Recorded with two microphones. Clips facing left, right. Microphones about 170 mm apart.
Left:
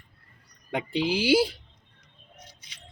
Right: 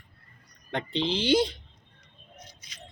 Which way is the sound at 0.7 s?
10° left (ahead or behind).